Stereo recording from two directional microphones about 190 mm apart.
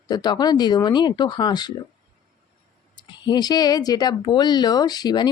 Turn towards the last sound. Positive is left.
turn(degrees=20)  # may be behind; listen again after turning